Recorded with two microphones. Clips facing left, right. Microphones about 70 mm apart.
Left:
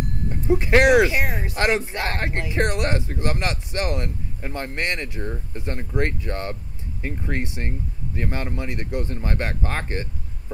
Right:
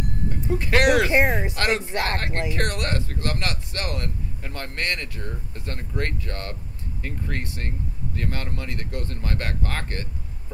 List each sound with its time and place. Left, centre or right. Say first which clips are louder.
0.3 s a sound: left 5 dB; left
1.1 s speech: right 5 dB; right
1.5 s speech: left 2 dB; left